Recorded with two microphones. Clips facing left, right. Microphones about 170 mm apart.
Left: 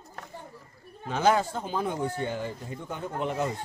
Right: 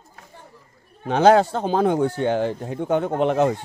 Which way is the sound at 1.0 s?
80° right.